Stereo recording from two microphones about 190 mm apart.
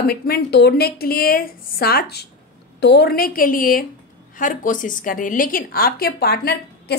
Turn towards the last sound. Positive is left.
turn(degrees=55)  # may be behind; listen again after turning